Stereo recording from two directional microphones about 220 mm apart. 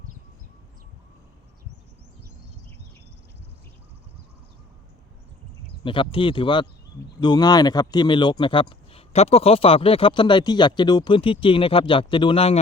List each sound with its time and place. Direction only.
5.8 s speech: 25° left (ahead or behind)